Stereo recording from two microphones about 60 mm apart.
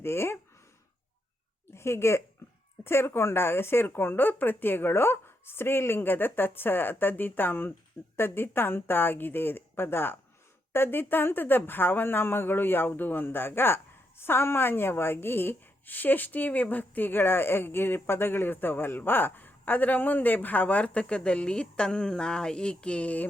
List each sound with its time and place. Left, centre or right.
0.0 s speech: left
1.7 s a woman's voice: left